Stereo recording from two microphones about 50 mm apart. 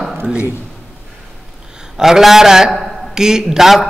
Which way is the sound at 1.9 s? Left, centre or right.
Centre.